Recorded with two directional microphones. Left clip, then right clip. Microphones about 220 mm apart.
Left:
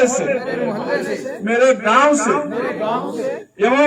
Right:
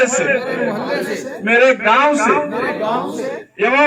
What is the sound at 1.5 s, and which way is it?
Speech, 50° left (ahead or behind).